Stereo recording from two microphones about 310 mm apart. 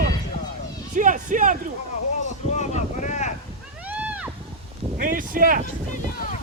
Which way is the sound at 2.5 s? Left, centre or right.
Left.